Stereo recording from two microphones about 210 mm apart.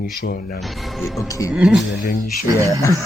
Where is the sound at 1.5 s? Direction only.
Centre (ahead or behind).